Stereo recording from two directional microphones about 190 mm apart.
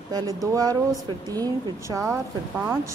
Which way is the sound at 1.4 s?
15° right (ahead or behind).